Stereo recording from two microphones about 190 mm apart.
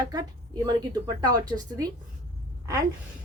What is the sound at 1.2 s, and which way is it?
Speech, 20° right (ahead or behind).